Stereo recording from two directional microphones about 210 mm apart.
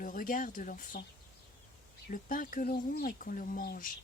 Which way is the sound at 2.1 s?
40° left (ahead or behind).